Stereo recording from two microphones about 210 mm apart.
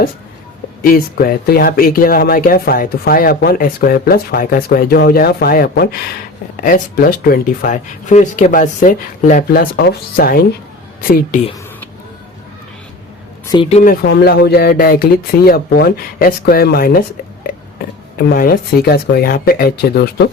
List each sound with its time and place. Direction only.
0.8 s speech: 45° left (ahead or behind)
13.4 s a sound: 20° left (ahead or behind)
13.7 s speech: 30° left (ahead or behind)
14.0 s speech: 50° left (ahead or behind)
18.2 s speech: 45° left (ahead or behind)